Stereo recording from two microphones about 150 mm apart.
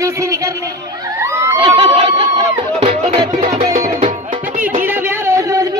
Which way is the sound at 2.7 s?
45° right (ahead or behind).